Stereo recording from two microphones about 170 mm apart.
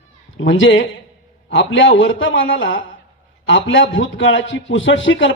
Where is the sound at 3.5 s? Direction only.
90° left.